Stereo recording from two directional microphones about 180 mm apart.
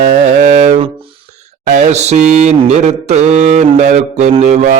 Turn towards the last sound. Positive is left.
turn(degrees=-40)  # may be behind; listen again after turning